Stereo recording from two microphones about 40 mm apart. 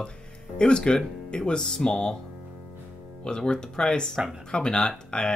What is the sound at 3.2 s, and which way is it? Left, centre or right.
Speech, left.